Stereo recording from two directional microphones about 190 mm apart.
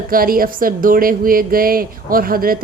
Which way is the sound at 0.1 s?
50° right (ahead or behind).